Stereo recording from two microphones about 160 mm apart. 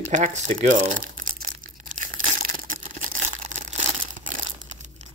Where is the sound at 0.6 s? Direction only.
50° right (ahead or behind).